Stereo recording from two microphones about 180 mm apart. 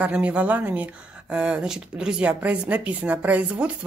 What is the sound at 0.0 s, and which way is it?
Speech, 5° right (ahead or behind).